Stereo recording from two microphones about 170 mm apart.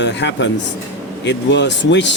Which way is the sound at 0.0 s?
90° left.